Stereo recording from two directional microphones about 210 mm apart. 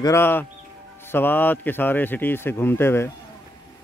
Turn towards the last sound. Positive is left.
turn(degrees=10)  # may be behind; listen again after turning